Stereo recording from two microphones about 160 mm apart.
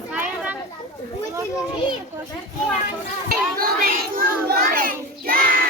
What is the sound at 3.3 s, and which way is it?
A child's voice, 65° right (ahead or behind).